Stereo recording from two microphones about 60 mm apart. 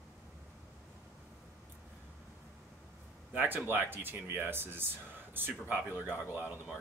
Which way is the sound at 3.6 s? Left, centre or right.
Right.